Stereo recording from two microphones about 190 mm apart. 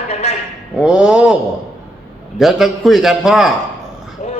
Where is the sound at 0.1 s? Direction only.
35° left (ahead or behind).